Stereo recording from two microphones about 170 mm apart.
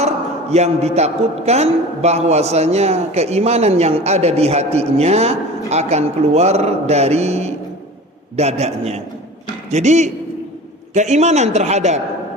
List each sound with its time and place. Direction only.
0.5 s a man's voice: 40° right (ahead or behind)